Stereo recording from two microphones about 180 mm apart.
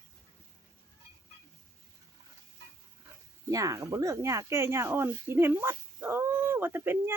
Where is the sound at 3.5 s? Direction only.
20° right (ahead or behind).